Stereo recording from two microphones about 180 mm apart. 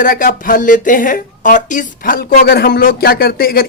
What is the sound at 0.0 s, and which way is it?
Speech, 50° left (ahead or behind).